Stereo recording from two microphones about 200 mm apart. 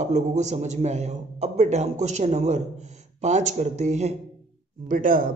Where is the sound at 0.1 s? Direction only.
35° right (ahead or behind).